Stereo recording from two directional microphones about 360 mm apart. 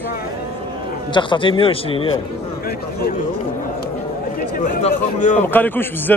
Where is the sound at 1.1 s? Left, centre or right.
Centre.